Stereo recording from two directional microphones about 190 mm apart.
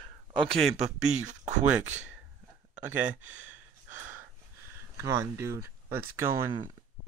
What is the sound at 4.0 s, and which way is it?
Gasp, 10° right (ahead or behind).